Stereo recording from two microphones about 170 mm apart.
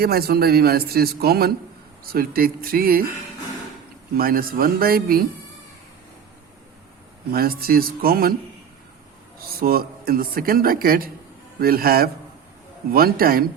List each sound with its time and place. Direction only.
0.0 s speech: 65° right (ahead or behind)
4.1 s speech: 60° right (ahead or behind)
7.3 s speech: 60° right (ahead or behind)
9.4 s speech: 60° right (ahead or behind)